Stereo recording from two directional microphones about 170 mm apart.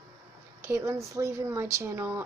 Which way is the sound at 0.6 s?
15° right (ahead or behind).